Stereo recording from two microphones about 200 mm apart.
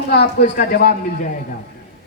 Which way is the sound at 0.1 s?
55° left (ahead or behind).